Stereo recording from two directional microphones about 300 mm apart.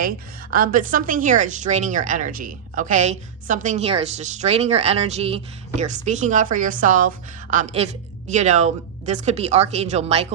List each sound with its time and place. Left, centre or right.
0.5 s a woman's voice: right